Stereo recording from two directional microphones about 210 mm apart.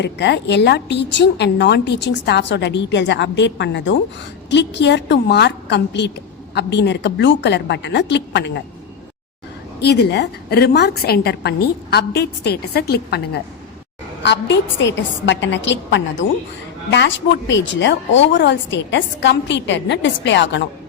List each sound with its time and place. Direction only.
0.0 s a woman's voice: 55° left (ahead or behind)
9.8 s a woman's voice: 55° left (ahead or behind)